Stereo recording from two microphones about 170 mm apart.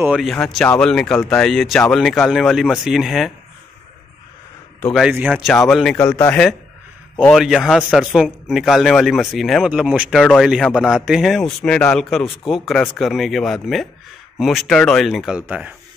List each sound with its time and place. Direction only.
0.0 s speech: 5° right (ahead or behind)
4.8 s speech: centre (ahead or behind)
5.9 s speech: 15° left (ahead or behind)
7.3 s speech: centre (ahead or behind)